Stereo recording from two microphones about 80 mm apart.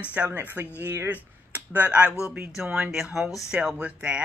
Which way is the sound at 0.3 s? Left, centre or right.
Right.